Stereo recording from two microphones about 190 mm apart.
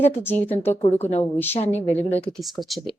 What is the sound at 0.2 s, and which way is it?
Speech, 10° left (ahead or behind).